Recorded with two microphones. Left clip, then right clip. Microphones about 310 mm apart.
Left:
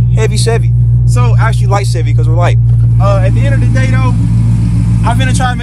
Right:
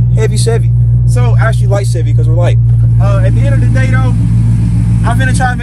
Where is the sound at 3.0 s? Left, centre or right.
Centre.